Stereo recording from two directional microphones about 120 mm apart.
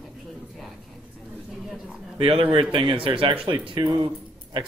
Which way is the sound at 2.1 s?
50° right (ahead or behind).